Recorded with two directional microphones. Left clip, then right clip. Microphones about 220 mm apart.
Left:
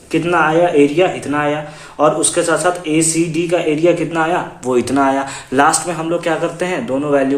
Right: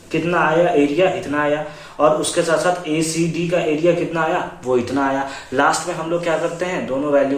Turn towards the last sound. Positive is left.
turn(degrees=50)  # may be behind; listen again after turning